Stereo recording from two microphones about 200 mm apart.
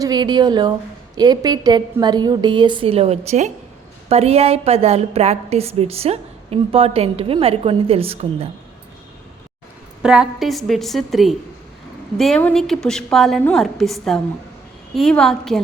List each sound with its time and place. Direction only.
0.0 s a woman's voice: 20° right (ahead or behind)
10.0 s a woman's voice: 5° right (ahead or behind)